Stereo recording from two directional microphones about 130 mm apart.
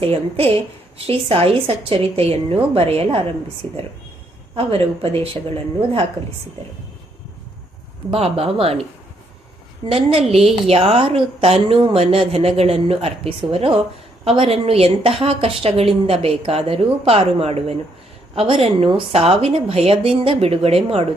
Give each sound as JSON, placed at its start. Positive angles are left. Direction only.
{"t": 0.0, "sound": "a woman's voice", "side_deg": -45}
{"t": 4.5, "sound": "a woman's voice", "side_deg": -50}
{"t": 8.1, "sound": "a woman's voice", "side_deg": -50}
{"t": 9.8, "sound": "a woman's voice", "side_deg": -50}